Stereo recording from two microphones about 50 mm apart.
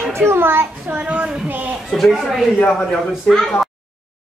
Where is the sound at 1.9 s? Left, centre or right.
Centre.